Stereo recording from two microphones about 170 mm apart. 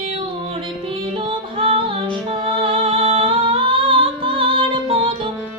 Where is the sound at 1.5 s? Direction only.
35° right (ahead or behind).